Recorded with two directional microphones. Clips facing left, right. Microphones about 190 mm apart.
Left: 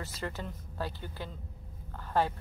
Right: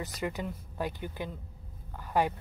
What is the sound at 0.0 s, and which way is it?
Speech, 15° right (ahead or behind).